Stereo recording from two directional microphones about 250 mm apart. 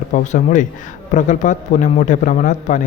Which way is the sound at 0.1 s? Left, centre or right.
Left.